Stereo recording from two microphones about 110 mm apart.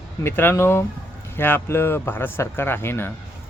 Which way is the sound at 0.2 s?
20° left (ahead or behind).